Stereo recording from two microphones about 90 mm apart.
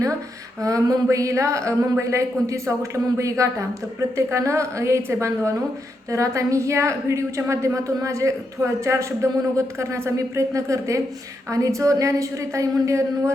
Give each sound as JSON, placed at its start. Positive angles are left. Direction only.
{"t": 0.6, "sound": "a woman's voice", "side_deg": -40}